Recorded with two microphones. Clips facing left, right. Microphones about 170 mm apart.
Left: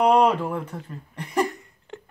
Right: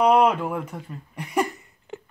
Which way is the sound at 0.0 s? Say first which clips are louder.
Even; 5° right (ahead or behind).